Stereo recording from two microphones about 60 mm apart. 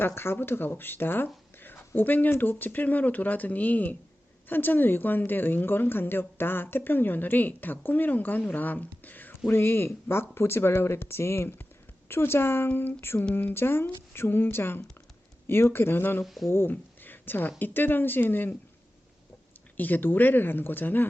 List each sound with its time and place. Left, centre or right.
0.0 s speech: left
16.2 s speech: centre
16.5 s speech: left
19.7 s speech: left